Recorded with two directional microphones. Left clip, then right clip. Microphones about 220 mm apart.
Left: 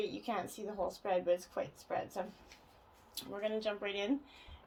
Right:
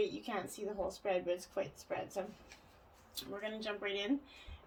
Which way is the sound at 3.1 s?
30° left (ahead or behind).